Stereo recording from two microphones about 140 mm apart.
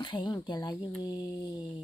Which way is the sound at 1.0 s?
30° left (ahead or behind).